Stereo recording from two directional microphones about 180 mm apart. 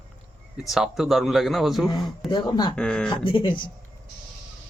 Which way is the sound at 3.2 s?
25° left (ahead or behind).